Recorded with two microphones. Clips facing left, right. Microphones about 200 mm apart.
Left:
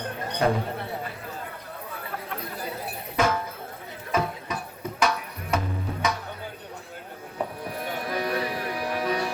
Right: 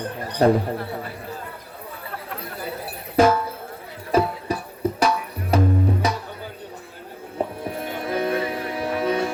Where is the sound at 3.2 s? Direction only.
35° right (ahead or behind).